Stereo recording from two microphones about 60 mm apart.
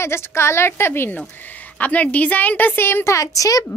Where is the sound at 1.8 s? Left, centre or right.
Left.